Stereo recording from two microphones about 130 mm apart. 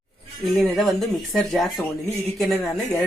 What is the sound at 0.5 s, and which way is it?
Speech, centre (ahead or behind).